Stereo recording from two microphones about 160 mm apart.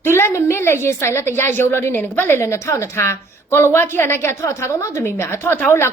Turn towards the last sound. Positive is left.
turn(degrees=15)  # may be behind; listen again after turning